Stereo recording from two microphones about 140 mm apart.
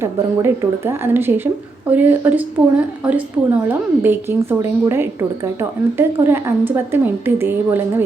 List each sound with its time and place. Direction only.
0.0 s a woman's voice: 15° right (ahead or behind)